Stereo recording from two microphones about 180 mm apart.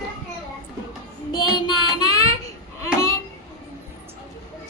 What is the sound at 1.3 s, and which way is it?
Child singing, 25° left (ahead or behind).